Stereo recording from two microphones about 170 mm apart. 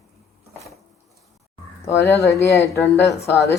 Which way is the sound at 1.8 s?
15° left (ahead or behind).